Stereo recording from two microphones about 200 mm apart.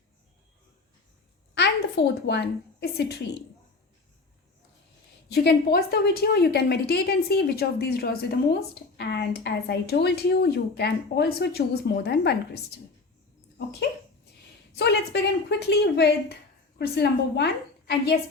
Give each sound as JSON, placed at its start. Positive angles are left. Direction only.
{"t": 2.2, "sound": "speech", "side_deg": 60}
{"t": 5.3, "sound": "a woman's voice", "side_deg": 55}
{"t": 14.8, "sound": "a woman's voice", "side_deg": 55}